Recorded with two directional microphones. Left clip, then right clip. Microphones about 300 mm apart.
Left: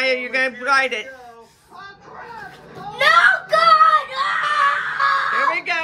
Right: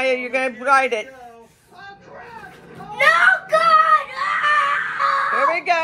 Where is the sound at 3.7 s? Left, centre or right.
Centre.